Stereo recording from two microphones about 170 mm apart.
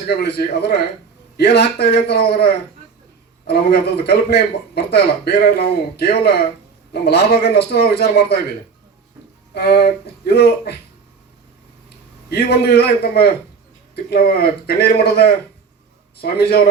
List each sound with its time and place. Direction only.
0.1 s a man's voice: 75° left (ahead or behind)
9.6 s a man's voice: 70° left (ahead or behind)
12.3 s a man's voice: 75° left (ahead or behind)